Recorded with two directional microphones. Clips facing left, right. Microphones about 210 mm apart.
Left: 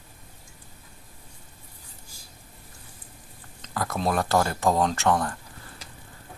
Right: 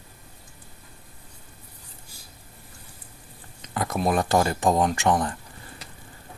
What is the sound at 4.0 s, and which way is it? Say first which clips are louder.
Speech: right 2 dB; 15° right (ahead or behind).